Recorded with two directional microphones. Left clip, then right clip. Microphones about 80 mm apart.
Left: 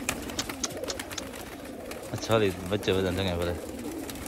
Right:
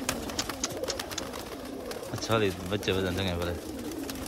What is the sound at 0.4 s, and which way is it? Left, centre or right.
Bird, right.